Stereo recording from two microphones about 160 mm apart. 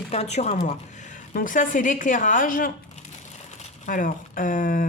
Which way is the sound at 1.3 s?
55° left (ahead or behind).